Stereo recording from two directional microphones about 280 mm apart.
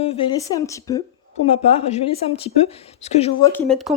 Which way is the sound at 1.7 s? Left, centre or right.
Left.